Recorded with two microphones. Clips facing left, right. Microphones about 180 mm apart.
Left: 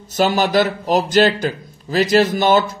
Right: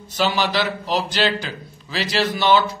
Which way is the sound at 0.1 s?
45° left (ahead or behind).